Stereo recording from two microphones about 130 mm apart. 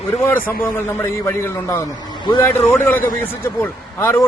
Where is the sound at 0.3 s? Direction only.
15° left (ahead or behind).